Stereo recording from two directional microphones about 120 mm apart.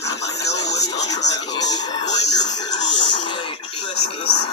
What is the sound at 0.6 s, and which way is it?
Television, 30° left (ahead or behind).